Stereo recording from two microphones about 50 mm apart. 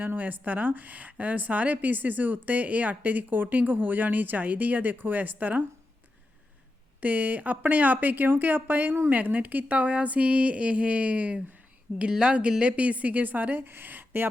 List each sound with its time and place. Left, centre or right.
0.0 s a woman's voice: right
7.0 s a woman's voice: right
9.0 s a woman's voice: right